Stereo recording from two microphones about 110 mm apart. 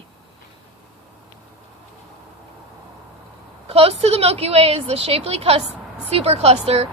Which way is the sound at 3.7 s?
65° right (ahead or behind).